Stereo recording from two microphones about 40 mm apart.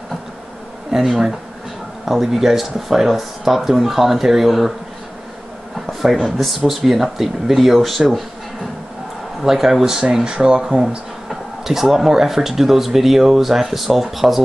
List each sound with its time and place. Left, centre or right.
0.9 s speech: centre
5.9 s a sound: centre
6.2 s speech: centre
9.4 s speech: centre
10.2 s speech: right; by 14.4 s centre